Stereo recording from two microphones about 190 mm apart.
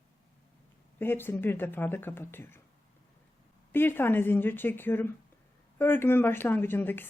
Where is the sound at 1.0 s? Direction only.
10° left (ahead or behind).